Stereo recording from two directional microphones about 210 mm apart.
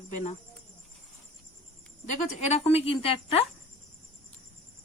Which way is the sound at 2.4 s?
30° left (ahead or behind).